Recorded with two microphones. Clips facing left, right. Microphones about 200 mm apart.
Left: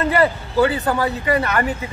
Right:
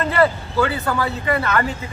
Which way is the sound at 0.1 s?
15° left (ahead or behind).